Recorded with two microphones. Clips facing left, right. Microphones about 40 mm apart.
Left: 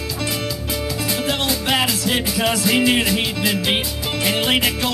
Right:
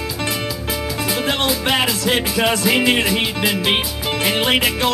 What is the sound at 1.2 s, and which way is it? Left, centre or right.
Music, right.